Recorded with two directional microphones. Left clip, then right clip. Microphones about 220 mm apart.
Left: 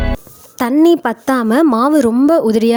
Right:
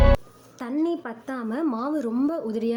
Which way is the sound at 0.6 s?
50° left (ahead or behind).